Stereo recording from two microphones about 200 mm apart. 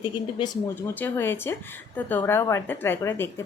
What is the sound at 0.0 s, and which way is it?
Speech, 20° left (ahead or behind).